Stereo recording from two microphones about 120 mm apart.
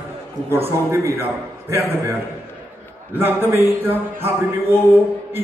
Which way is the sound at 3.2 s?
20° right (ahead or behind).